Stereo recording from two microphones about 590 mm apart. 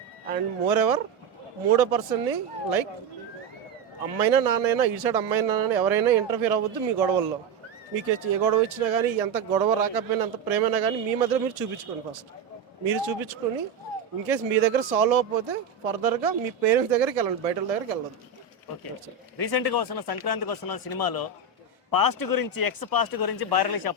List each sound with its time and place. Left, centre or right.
0.3 s speech: right
4.2 s speech: right
12.8 s speech: right
19.4 s speech: left